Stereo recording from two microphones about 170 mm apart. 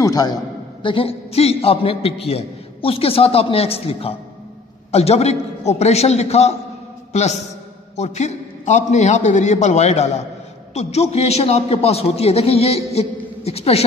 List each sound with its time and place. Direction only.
0.0 s a man's voice: 20° left (ahead or behind)
0.8 s a man's voice: 35° left (ahead or behind)